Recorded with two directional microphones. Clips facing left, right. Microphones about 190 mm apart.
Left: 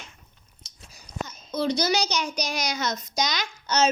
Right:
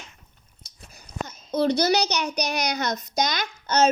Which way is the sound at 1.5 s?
60° right (ahead or behind).